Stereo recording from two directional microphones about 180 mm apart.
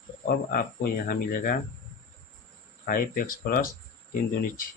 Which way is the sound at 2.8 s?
55° left (ahead or behind).